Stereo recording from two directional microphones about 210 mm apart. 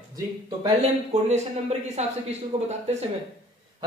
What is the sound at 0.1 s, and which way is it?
Speech, 20° right (ahead or behind).